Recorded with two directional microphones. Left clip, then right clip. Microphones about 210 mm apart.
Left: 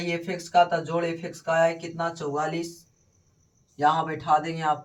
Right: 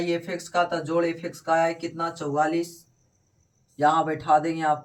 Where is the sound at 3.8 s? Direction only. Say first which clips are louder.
Right 2 dB; 10° left (ahead or behind).